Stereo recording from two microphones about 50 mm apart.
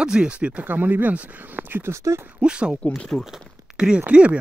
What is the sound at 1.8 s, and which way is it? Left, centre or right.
Speech, right.